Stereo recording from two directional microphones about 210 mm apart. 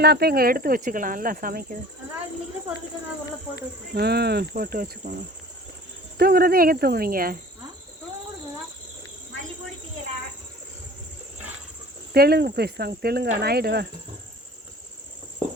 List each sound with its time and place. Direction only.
0.0 s speech: 50° right (ahead or behind)
3.9 s speech: 50° right (ahead or behind)
6.1 s speech: 45° right (ahead or behind)
12.1 s speech: 50° right (ahead or behind)